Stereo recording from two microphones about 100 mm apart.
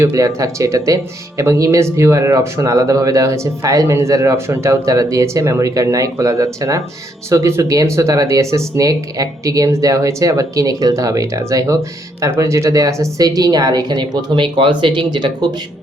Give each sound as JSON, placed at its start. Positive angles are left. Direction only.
{"t": 0.0, "sound": "speech", "side_deg": -35}